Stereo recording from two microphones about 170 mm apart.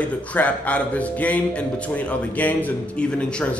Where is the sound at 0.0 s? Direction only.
10° left (ahead or behind).